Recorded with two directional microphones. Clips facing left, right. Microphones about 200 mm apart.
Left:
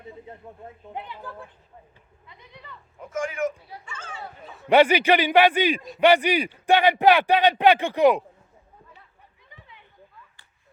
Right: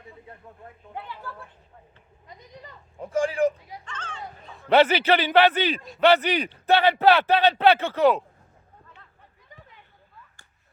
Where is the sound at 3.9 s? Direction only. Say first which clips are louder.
Right 1 dB; 10° left (ahead or behind).